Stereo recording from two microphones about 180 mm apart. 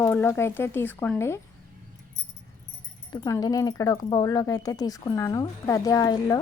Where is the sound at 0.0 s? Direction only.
10° left (ahead or behind).